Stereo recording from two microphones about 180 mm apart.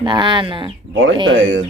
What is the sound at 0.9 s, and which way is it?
Speech, 90° right.